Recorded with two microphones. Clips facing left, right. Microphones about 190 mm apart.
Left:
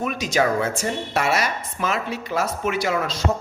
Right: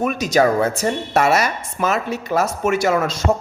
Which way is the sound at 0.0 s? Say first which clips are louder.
Right 5 dB; 45° right (ahead or behind).